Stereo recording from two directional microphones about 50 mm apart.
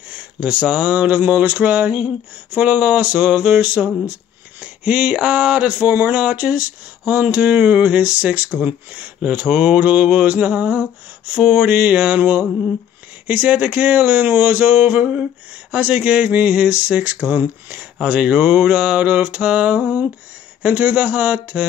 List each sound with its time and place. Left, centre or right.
0.1 s mantra: right
8.9 s mantra: right
12.2 s speech: right
15.7 s mantra: right
16.9 s speech: right
18.0 s mantra: right
20.6 s speech: right